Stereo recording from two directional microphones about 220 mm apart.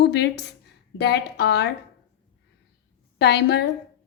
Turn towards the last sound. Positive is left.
turn(degrees=50)  # may be behind; listen again after turning